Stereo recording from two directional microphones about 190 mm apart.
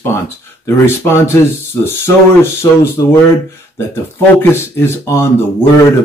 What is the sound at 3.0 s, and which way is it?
Speech, 20° left (ahead or behind).